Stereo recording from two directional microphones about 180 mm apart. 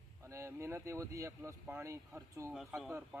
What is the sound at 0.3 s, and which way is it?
Speech, 15° right (ahead or behind).